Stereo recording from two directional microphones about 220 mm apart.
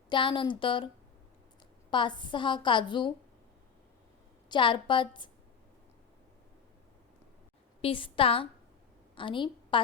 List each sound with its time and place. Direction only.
0.1 s a woman's voice: 20° left (ahead or behind)
1.9 s a woman's voice: 20° left (ahead or behind)
4.4 s a woman's voice: 20° left (ahead or behind)
7.8 s a woman's voice: 25° left (ahead or behind)